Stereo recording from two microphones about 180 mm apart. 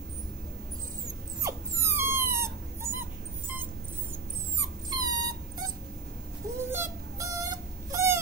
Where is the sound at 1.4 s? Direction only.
15° right (ahead or behind).